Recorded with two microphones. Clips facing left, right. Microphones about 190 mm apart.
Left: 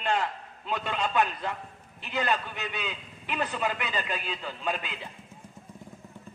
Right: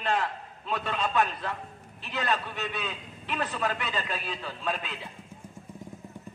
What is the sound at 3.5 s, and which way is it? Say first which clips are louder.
Speech: even; 15° left (ahead or behind).